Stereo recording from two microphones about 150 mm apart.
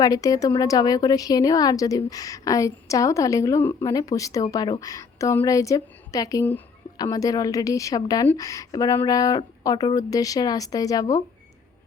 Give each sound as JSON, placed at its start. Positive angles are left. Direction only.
{"t": 0.0, "sound": "a woman's voice", "side_deg": 25}